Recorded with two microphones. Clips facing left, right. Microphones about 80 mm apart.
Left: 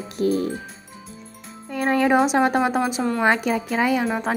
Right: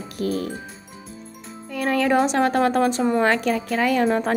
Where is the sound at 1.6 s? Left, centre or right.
Left.